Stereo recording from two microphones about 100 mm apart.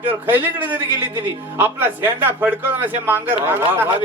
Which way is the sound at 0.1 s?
20° right (ahead or behind).